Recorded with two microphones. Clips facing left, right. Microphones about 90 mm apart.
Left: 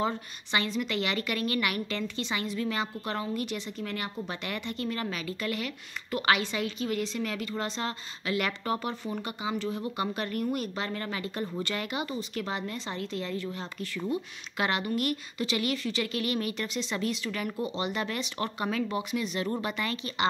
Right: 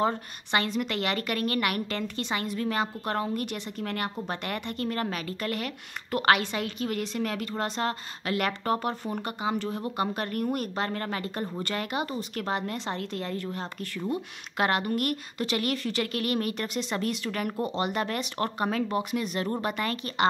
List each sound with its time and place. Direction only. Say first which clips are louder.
0.0 s a woman's voice: right 3 dB; 50° right (ahead or behind)